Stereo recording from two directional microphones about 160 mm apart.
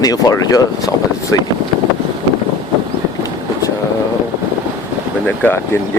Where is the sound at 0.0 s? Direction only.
25° left (ahead or behind).